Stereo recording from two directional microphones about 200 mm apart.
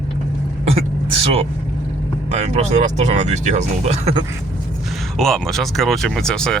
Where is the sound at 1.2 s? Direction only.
30° right (ahead or behind).